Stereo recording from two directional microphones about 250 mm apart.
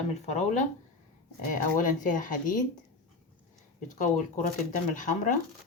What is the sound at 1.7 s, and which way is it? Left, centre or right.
Speech, left.